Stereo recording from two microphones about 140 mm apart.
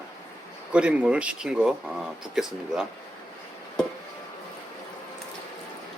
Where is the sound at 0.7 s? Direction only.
10° right (ahead or behind).